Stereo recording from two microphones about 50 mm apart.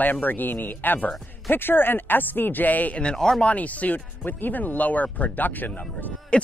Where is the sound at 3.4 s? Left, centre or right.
Left.